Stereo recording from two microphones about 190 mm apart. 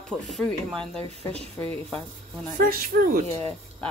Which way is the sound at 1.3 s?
30° right (ahead or behind).